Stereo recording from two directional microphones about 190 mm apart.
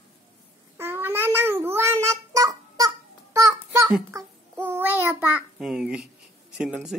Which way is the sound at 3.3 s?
15° right (ahead or behind).